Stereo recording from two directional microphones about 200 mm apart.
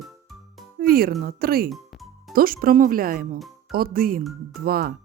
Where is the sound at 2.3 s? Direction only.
45° right (ahead or behind).